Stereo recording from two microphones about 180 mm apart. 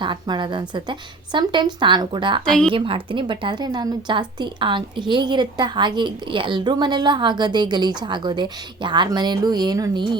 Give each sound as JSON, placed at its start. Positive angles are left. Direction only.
{"t": 0.0, "sound": "a woman's voice", "side_deg": -25}
{"t": 2.4, "sound": "speech", "side_deg": 5}
{"t": 2.7, "sound": "a woman's voice", "side_deg": -30}